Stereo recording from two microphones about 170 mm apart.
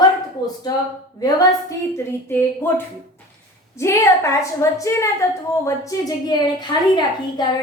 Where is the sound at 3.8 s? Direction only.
15° left (ahead or behind).